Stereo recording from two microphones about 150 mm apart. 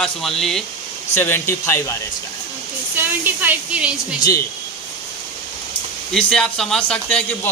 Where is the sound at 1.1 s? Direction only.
15° left (ahead or behind).